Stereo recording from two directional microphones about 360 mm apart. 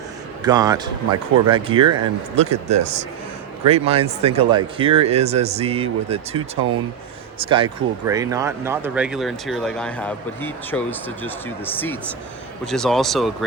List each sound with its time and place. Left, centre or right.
0.4 s speech: centre